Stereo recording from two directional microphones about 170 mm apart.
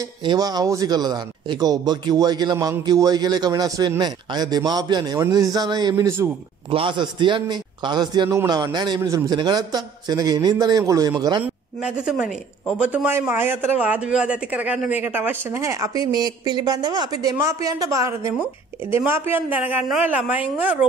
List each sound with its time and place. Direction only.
0.2 s a man's voice: 25° right (ahead or behind)
6.7 s a man's voice: 30° right (ahead or behind)
11.4 s speech: 5° right (ahead or behind)